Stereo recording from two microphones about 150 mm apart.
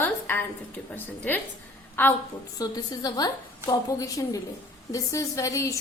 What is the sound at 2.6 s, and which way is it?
A woman's voice, 25° left (ahead or behind).